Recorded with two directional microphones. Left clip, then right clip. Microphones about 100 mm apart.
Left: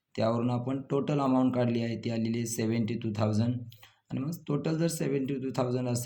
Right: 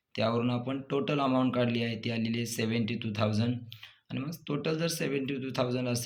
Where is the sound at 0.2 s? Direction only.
25° left (ahead or behind).